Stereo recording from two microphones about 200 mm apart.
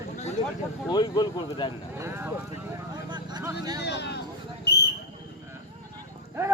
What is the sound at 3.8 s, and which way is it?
Speech, 60° left (ahead or behind).